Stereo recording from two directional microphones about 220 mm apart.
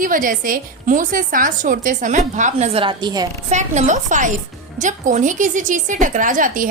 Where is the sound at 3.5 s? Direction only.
35° right (ahead or behind).